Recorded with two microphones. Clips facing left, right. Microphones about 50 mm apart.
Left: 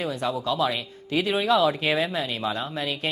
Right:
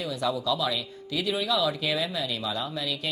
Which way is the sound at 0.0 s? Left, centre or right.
Left.